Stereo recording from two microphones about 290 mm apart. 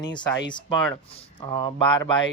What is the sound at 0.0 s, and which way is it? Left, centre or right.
Speech, centre.